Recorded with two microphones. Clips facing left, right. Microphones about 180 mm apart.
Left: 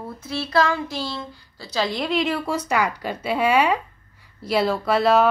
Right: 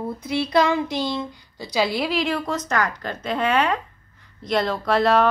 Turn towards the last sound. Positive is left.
turn(degrees=5)  # may be behind; listen again after turning